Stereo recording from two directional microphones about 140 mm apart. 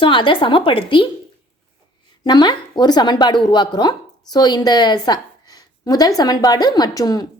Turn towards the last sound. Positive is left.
turn(degrees=25)  # may be behind; listen again after turning